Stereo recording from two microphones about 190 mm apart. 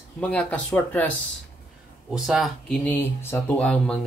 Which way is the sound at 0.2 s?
5° left (ahead or behind).